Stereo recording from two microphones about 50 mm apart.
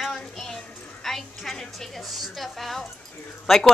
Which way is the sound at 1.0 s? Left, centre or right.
Centre.